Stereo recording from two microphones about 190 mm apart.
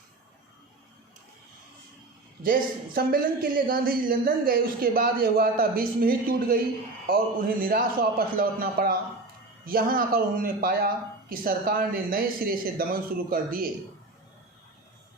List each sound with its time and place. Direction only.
2.4 s speech: 50° right (ahead or behind)